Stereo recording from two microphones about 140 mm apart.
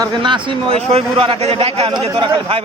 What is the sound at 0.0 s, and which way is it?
A man's voice, 35° right (ahead or behind).